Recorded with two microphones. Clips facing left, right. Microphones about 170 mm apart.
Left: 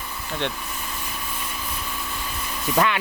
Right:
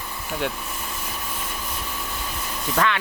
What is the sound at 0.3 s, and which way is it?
Speech, 5° right (ahead or behind).